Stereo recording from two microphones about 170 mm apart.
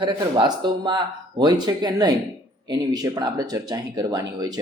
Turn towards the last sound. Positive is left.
turn(degrees=-25)  # may be behind; listen again after turning